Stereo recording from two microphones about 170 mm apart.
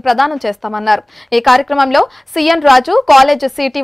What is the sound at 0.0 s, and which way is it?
A woman's voice, centre (ahead or behind).